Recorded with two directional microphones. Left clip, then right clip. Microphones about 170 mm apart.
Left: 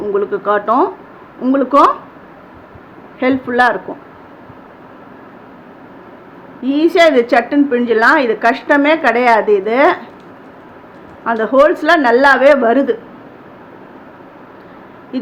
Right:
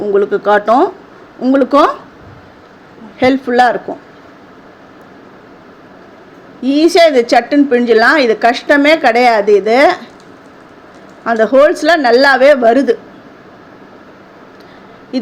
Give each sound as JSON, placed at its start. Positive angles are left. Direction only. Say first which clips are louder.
{"t": 0.1, "sound": "a woman's voice", "louder": "right 5 dB", "side_deg": -30}
{"t": 3.2, "sound": "a woman's voice", "louder": "right 3 dB", "side_deg": -25}
{"t": 6.6, "sound": "a woman's voice", "louder": "right 3 dB", "side_deg": -25}
{"t": 11.2, "sound": "a woman's voice", "louder": "right 2 dB", "side_deg": -25}